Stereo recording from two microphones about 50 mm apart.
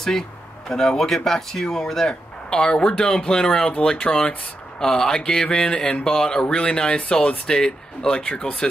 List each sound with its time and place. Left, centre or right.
0.7 s speech: centre; by 4.4 s left
4.7 s speech: centre